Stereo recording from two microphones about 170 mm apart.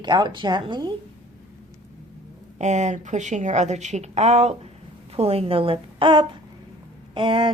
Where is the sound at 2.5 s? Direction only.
40° right (ahead or behind).